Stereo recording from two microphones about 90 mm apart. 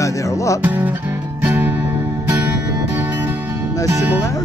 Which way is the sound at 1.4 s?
20° right (ahead or behind).